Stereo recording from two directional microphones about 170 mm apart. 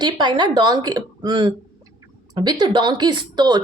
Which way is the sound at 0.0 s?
25° right (ahead or behind).